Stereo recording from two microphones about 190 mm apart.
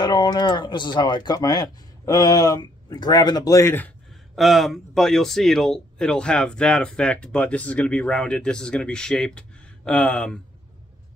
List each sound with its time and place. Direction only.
0.0 s speech: 25° left (ahead or behind)
4.1 s speech: centre (ahead or behind)